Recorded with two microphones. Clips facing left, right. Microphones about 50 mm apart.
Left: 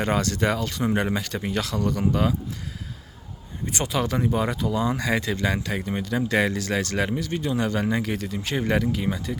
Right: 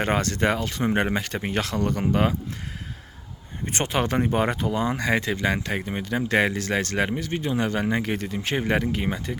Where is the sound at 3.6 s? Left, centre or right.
Right.